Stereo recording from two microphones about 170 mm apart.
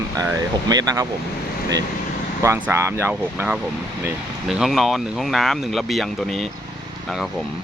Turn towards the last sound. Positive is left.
turn(degrees=0)  # may be behind; listen again after turning